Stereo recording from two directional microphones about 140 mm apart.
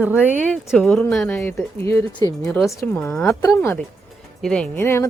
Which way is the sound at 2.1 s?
25° left (ahead or behind).